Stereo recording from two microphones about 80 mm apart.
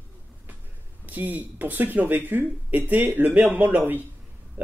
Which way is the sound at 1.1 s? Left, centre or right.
Right.